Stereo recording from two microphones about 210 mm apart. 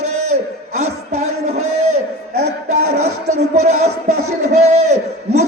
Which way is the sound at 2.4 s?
35° right (ahead or behind).